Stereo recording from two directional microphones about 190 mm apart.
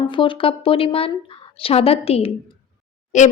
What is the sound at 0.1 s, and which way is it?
Speech, 25° left (ahead or behind).